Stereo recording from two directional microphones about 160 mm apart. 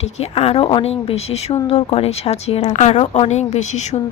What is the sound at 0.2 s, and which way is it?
A woman's voice, 40° left (ahead or behind).